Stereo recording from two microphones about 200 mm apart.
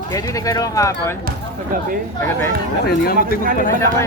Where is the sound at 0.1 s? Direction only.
15° left (ahead or behind).